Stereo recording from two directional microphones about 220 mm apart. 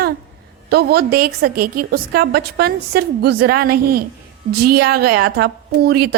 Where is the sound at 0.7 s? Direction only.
45° right (ahead or behind).